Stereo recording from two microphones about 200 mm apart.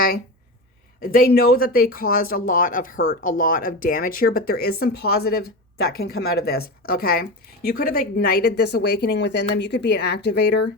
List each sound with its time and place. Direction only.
1.0 s speech: 45° left (ahead or behind)